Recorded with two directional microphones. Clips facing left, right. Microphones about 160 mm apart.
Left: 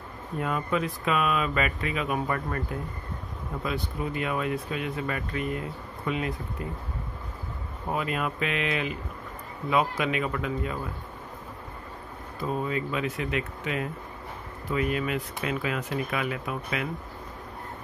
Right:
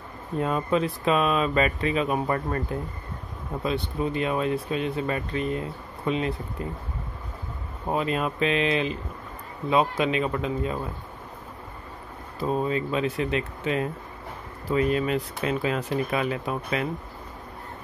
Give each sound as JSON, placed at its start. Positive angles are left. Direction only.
{"t": 0.4, "sound": "speech", "side_deg": -25}
{"t": 7.9, "sound": "speech", "side_deg": -25}
{"t": 12.4, "sound": "speech", "side_deg": -30}